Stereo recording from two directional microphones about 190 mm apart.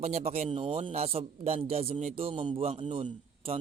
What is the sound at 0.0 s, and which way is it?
A man's voice, 35° right (ahead or behind).